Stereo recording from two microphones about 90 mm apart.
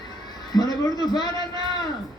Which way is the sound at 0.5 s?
50° left (ahead or behind).